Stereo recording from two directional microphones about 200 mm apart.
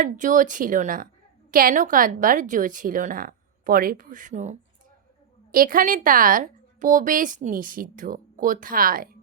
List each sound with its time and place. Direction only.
0.0 s a woman's voice: 40° right (ahead or behind)